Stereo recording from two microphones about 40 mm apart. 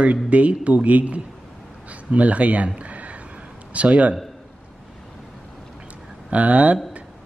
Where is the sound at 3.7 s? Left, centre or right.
Right.